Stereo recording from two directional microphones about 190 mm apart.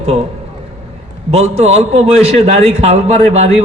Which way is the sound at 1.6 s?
35° right (ahead or behind).